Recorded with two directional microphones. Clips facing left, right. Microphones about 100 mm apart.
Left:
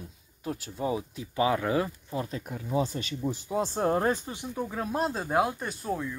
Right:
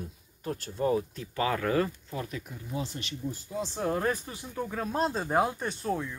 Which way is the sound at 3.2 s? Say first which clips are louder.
Left 6 dB; 80° left.